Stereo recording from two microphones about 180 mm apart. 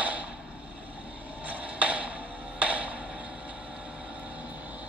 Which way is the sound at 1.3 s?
10° right (ahead or behind).